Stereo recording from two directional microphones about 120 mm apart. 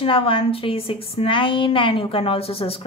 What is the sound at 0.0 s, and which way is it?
A woman's voice, 50° left (ahead or behind).